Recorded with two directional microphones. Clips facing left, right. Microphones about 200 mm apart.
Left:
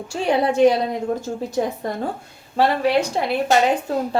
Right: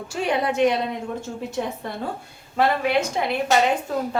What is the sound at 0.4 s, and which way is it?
A woman's voice, 30° left (ahead or behind).